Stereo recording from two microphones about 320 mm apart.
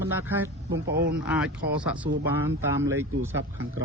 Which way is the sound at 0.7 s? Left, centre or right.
Right.